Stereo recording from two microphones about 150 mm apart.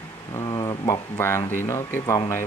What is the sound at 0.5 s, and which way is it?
Speech, 25° left (ahead or behind).